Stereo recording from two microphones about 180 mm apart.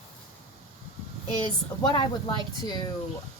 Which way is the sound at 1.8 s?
25° left (ahead or behind).